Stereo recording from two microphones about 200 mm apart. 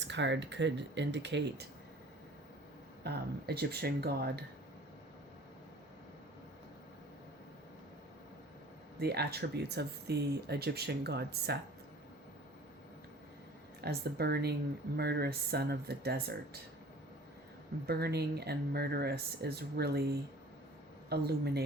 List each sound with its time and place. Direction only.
0.0 s speech: 60° right (ahead or behind)
3.0 s speech: 55° right (ahead or behind)
9.0 s speech: 55° right (ahead or behind)
13.8 s speech: 50° right (ahead or behind)
17.8 s speech: 50° right (ahead or behind)